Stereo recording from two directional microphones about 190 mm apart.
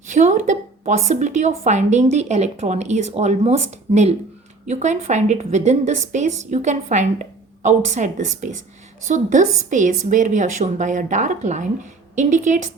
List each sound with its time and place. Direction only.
0.1 s a woman's voice: 40° right (ahead or behind)